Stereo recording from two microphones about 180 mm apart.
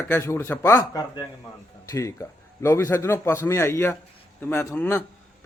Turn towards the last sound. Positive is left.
turn(degrees=10)  # may be behind; listen again after turning